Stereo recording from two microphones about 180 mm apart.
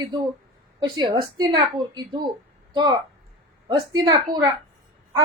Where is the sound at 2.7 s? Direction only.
25° right (ahead or behind).